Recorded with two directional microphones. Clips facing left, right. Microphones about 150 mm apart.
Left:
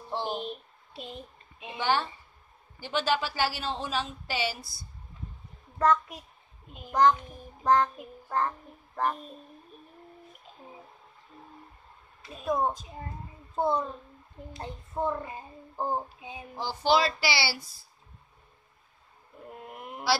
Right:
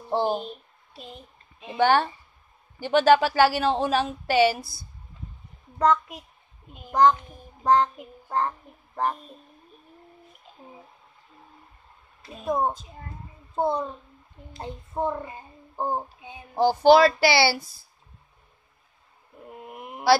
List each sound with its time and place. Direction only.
0.1 s speech: 45° right (ahead or behind)
1.8 s speech: 60° right (ahead or behind)
5.8 s a child's voice: 15° right (ahead or behind)
7.8 s speech: 25° right (ahead or behind)
12.4 s a child's voice: 25° right (ahead or behind)
16.2 s child singing: 30° left (ahead or behind)
16.5 s speech: 55° right (ahead or behind)
19.6 s a sound: 5° right (ahead or behind)